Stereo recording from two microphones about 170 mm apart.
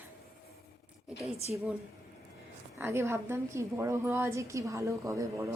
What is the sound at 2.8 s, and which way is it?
A woman's voice, 15° right (ahead or behind).